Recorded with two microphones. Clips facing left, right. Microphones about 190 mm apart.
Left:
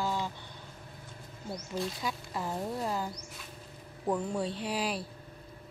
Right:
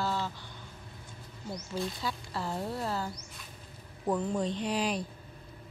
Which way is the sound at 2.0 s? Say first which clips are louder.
Even; 15° left (ahead or behind).